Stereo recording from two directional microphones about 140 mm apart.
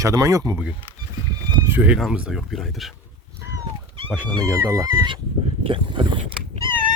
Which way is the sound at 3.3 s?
20° right (ahead or behind).